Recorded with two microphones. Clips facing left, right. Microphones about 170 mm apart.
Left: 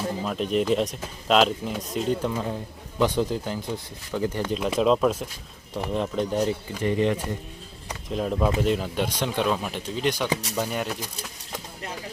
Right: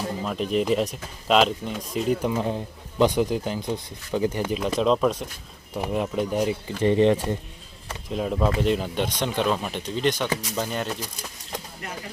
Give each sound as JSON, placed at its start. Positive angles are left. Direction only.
{"t": 0.2, "sound": "speech", "side_deg": 0}
{"t": 2.2, "sound": "speech", "side_deg": -15}
{"t": 4.6, "sound": "speech", "side_deg": 5}
{"t": 5.7, "sound": "speech", "side_deg": -10}
{"t": 6.8, "sound": "speech", "side_deg": -25}
{"t": 8.1, "sound": "speech", "side_deg": 0}